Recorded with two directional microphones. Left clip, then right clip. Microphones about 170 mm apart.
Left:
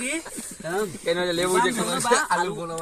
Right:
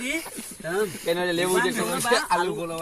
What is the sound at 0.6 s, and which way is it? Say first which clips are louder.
Speech: right 1 dB; 20° left (ahead or behind).